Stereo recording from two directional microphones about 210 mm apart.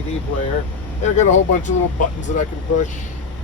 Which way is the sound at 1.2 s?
35° left (ahead or behind).